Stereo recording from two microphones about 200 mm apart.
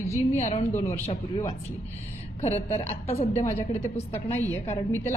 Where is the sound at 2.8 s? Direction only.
30° left (ahead or behind).